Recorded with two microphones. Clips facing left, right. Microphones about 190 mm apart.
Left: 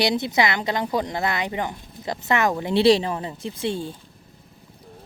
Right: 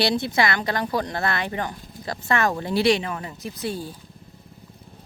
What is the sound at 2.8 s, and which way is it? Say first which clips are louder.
A woman's voice: left 5 dB; 30° left (ahead or behind).